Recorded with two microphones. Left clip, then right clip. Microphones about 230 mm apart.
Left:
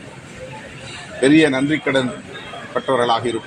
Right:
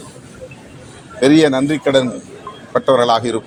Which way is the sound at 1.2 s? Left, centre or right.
Right.